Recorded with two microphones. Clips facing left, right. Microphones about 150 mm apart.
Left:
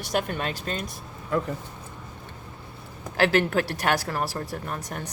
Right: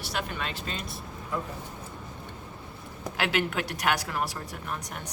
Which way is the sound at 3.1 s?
40° left (ahead or behind).